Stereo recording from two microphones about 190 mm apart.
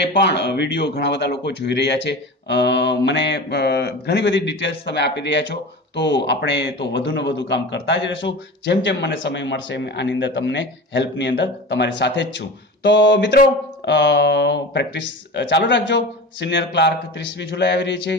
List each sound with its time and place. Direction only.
0.0 s speech: 60° left (ahead or behind)